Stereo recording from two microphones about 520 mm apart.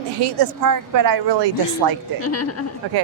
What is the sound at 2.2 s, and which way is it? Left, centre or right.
Speech, left.